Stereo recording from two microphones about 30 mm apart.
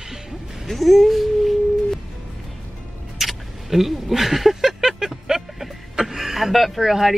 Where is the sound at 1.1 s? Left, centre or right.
Centre.